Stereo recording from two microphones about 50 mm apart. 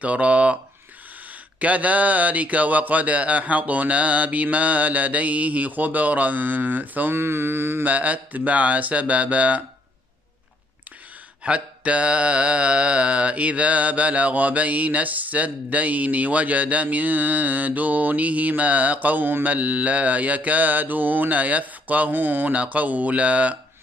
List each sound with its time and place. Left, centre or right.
0.0 s mantra: right
1.6 s speech: right
7.2 s mantra: right
7.8 s mantra: right
11.4 s mantra: right
18.6 s speech: right